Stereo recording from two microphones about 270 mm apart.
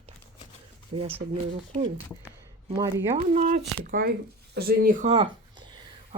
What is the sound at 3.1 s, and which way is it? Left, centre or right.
Speech, right.